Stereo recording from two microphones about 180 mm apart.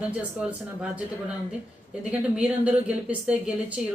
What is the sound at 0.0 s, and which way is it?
A woman's voice, 5° right (ahead or behind).